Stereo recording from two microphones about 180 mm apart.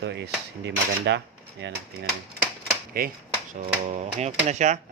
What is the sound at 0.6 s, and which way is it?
Dishes, 75° right (ahead or behind).